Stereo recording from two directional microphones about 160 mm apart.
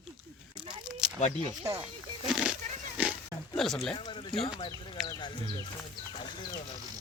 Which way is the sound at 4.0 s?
30° left (ahead or behind).